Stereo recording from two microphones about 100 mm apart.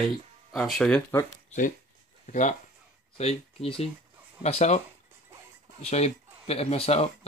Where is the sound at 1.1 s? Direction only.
20° left (ahead or behind).